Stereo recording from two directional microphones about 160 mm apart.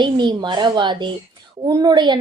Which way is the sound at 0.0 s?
30° right (ahead or behind).